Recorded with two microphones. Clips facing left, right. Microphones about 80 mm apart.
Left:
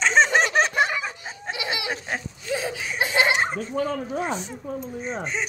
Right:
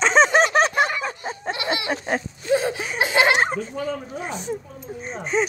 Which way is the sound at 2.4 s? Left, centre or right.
Right.